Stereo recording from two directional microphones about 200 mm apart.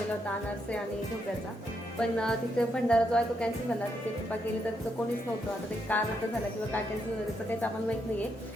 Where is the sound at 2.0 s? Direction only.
5° left (ahead or behind).